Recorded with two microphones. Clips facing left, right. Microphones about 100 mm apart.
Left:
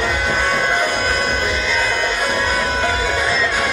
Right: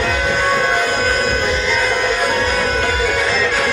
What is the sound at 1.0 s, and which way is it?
Music, centre (ahead or behind).